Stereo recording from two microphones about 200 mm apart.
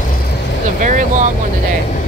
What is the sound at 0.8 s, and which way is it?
Vehicle, 40° right (ahead or behind).